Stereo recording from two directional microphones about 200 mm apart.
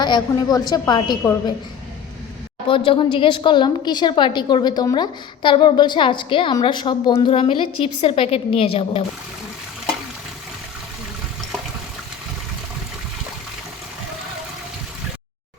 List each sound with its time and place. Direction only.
0.0 s a woman's voice: 20° left (ahead or behind)
2.6 s a woman's voice: 25° left (ahead or behind)